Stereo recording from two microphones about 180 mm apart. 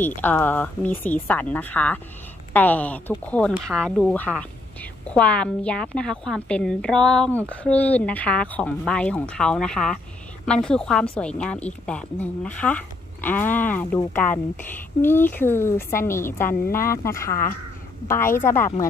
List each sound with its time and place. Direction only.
0.0 s a woman's voice: 10° left (ahead or behind)